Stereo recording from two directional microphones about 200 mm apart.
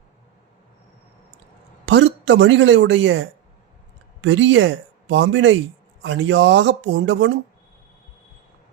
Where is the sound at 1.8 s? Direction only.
65° right (ahead or behind).